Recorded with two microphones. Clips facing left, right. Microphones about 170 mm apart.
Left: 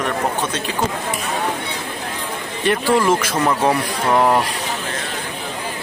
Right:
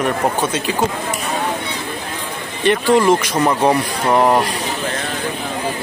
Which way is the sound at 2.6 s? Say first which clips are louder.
Right 3 dB; 5° left (ahead or behind).